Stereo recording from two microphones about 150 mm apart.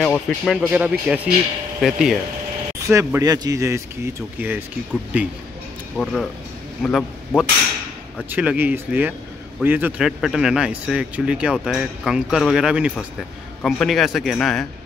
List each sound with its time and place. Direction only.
0.0 s speech: 10° left (ahead or behind)
0.6 s a man's voice: 10° right (ahead or behind)
2.9 s speech: 20° right (ahead or behind)
6.8 s a man's voice: 5° left (ahead or behind)
8.3 s a man's voice: 10° right (ahead or behind)